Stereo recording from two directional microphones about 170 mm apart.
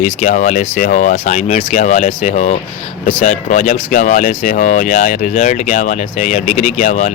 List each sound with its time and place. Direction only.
0.0 s speech: 45° left (ahead or behind)